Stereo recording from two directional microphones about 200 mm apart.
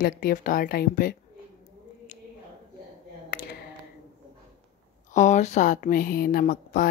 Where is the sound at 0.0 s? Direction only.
45° left (ahead or behind).